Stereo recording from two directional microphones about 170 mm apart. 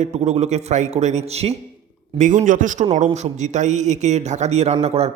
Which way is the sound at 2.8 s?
40° right (ahead or behind).